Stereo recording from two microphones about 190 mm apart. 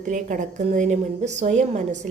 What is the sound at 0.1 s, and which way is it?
A woman's voice, 40° right (ahead or behind).